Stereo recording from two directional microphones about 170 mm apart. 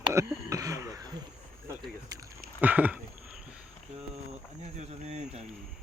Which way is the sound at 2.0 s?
20° right (ahead or behind).